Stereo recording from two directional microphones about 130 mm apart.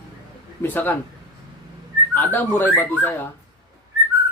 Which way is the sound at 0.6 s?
15° left (ahead or behind).